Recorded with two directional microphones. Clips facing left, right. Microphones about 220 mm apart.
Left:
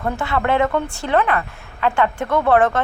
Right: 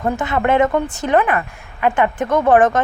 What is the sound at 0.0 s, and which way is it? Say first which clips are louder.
A woman's voice: right 3 dB; 20° right (ahead or behind).